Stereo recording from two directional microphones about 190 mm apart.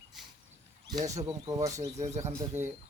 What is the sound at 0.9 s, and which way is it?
Speech, 20° right (ahead or behind).